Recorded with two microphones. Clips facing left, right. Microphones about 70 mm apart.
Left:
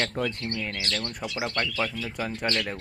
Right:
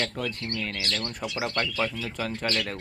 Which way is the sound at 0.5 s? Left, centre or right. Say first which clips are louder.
Even; centre.